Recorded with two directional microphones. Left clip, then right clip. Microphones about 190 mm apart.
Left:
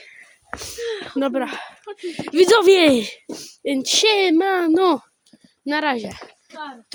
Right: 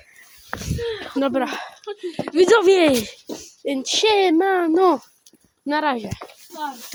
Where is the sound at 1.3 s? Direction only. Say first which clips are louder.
Right 1 dB; 5° left (ahead or behind).